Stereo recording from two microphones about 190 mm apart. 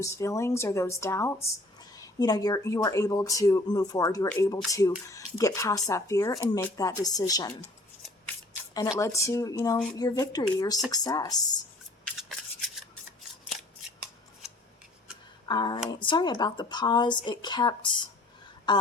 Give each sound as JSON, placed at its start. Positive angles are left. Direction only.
{"t": 0.0, "sound": "speech", "side_deg": 15}
{"t": 8.7, "sound": "speech", "side_deg": 20}
{"t": 12.0, "sound": "scissors", "side_deg": 0}
{"t": 15.4, "sound": "speech", "side_deg": 25}